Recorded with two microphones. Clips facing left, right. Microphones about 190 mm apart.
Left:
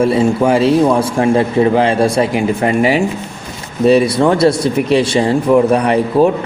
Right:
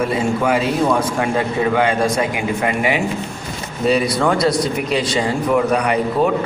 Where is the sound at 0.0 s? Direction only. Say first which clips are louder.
Left 6 dB; 30° left (ahead or behind).